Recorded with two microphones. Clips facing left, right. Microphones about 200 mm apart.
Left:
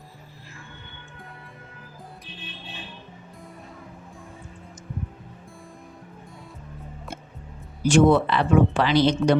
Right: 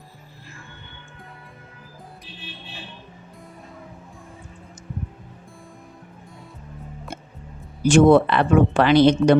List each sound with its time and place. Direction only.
7.9 s speech: 55° right (ahead or behind)